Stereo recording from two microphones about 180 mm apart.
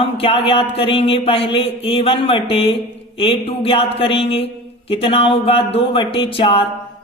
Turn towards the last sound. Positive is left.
turn(degrees=30)  # may be behind; listen again after turning